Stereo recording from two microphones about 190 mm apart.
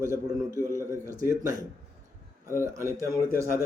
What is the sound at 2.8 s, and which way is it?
Speech, 15° right (ahead or behind).